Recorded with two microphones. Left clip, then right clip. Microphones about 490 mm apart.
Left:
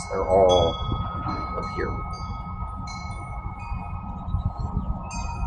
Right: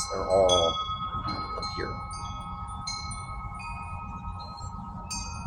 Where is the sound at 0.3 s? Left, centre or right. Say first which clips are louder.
Left 4 dB; right.